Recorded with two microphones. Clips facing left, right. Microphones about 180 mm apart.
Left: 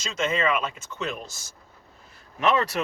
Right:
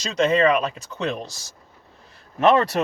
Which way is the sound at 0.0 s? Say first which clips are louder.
Right 7 dB; 35° right (ahead or behind).